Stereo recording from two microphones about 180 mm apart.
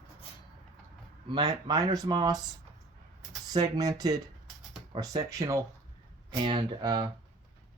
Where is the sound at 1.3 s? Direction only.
20° right (ahead or behind).